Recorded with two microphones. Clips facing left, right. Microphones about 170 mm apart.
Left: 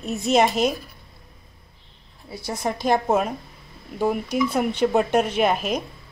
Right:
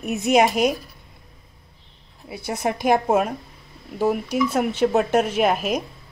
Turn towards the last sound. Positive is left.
turn(degrees=-5)  # may be behind; listen again after turning